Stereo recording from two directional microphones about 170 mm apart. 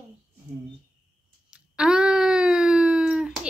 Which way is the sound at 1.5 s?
5° right (ahead or behind).